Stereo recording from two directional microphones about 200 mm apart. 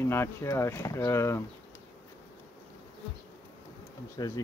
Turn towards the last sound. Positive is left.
turn(degrees=20)  # may be behind; listen again after turning